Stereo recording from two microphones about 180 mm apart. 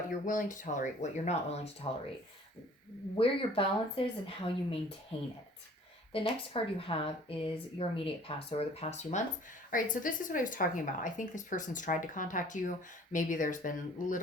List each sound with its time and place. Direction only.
0.3 s a woman's voice: 45° left (ahead or behind)
3.2 s a woman's voice: 30° left (ahead or behind); by 14.2 s 45° left (ahead or behind)